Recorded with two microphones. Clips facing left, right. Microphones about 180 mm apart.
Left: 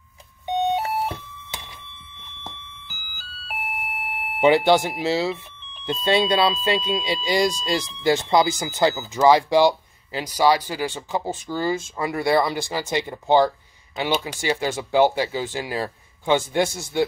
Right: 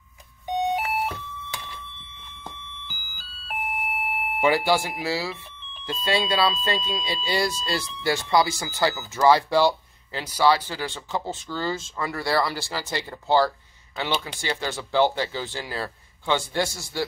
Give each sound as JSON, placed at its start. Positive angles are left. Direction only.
{"t": 0.5, "sound": "doorbell", "side_deg": 25}
{"t": 2.4, "sound": "alarm", "side_deg": 5}
{"t": 4.4, "sound": "speech", "side_deg": 25}